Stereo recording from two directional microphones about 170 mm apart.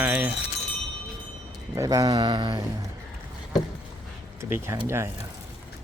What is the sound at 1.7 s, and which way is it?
Speech, 20° right (ahead or behind).